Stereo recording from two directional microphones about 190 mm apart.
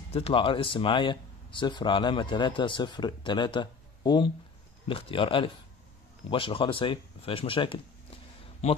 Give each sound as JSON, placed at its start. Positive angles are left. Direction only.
{"t": 0.1, "sound": "speech", "side_deg": 30}